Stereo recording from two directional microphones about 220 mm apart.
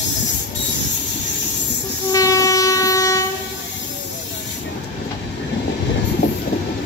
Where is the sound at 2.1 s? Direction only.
15° left (ahead or behind).